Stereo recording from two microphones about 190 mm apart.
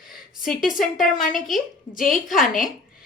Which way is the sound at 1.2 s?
45° left (ahead or behind).